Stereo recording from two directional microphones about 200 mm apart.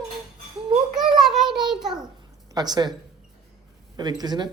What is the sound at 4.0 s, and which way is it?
Speech, 20° right (ahead or behind).